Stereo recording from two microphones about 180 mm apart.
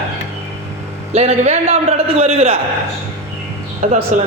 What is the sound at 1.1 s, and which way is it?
A man's voice, 40° right (ahead or behind).